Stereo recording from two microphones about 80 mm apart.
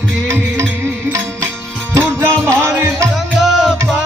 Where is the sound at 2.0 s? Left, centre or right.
Right.